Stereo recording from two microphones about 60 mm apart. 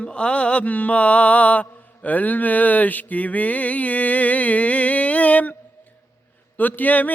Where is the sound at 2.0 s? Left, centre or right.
Left.